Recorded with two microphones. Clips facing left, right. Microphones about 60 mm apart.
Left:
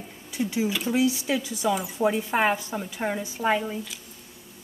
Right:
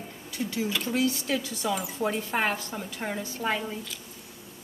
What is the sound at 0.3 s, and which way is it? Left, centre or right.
Speech, centre.